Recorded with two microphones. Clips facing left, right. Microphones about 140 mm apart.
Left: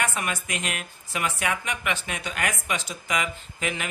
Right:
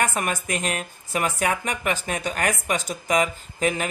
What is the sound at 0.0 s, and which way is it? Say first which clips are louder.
Speech: right 4 dB; 45° right (ahead or behind).